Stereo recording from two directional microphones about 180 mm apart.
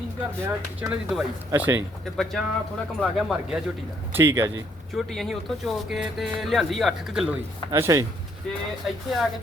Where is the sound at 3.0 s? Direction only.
Centre (ahead or behind).